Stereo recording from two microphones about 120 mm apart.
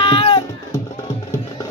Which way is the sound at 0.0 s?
50° left (ahead or behind).